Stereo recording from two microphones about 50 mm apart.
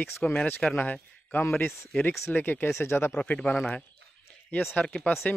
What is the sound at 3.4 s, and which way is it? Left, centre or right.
Speech, centre.